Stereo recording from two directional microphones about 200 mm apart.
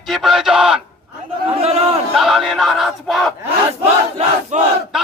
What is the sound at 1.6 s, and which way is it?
Speech, 30° right (ahead or behind).